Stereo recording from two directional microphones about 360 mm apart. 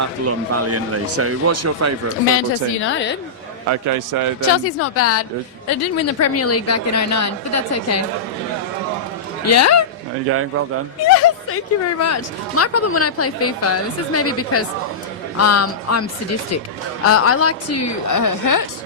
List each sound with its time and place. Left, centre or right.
0.0 s speech: right
2.8 s a woman's voice: left
3.7 s a man's voice: right
4.5 s a woman's voice: left
9.5 s a woman's voice: left
11.0 s a woman's voice: left
17.1 s a woman's voice: left